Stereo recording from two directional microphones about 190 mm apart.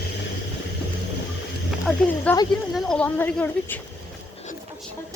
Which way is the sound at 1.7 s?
5° left (ahead or behind).